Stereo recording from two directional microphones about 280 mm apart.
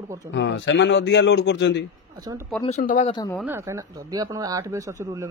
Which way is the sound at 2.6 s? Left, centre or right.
Left.